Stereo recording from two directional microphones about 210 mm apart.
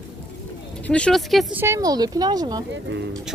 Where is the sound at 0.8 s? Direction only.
5° left (ahead or behind).